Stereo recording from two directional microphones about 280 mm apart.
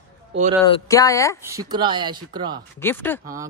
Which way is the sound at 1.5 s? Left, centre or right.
Centre.